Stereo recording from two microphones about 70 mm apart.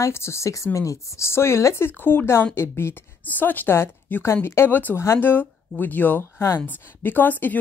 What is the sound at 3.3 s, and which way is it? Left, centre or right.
Speech, left.